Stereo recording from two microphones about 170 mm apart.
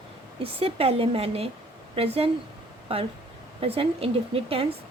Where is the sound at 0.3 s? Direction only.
35° right (ahead or behind).